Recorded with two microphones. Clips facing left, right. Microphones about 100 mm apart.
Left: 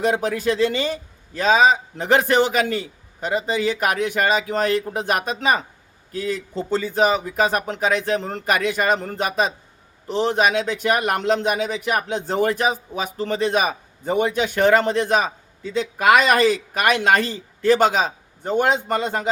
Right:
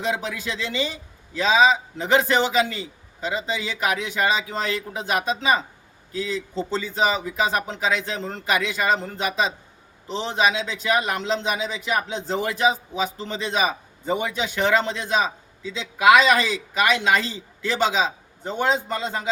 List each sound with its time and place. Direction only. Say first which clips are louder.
0.0 s a man's voice: left 6 dB; 50° left (ahead or behind)